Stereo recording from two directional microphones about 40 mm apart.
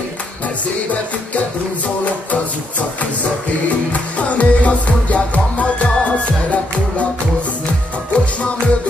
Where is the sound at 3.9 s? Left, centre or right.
Left.